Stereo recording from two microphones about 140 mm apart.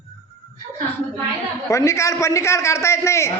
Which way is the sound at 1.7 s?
20° left (ahead or behind).